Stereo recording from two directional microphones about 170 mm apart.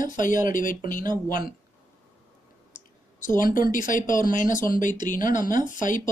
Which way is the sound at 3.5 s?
50° left (ahead or behind).